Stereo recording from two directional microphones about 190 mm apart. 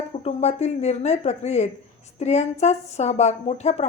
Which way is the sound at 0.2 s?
35° left (ahead or behind).